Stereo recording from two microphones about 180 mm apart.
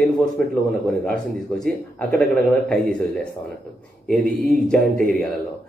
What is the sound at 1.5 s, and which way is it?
A man's voice, 5° left (ahead or behind).